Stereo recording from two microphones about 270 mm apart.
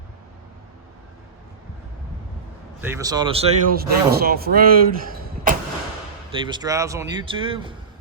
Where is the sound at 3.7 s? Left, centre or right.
Right.